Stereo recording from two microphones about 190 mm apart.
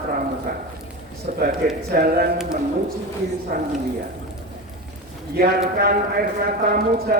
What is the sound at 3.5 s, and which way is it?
Speech, 50° right (ahead or behind).